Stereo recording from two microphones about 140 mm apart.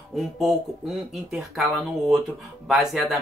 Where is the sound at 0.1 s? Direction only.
Centre (ahead or behind).